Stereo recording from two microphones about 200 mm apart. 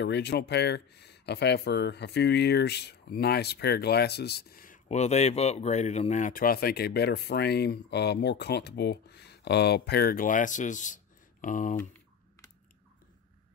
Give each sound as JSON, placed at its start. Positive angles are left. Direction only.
{"t": 0.0, "sound": "speech", "side_deg": 55}